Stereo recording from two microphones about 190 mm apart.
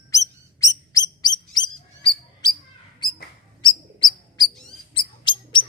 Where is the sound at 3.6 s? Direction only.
25° left (ahead or behind).